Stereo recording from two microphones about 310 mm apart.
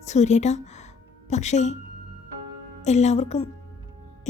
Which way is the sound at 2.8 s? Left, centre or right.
Left.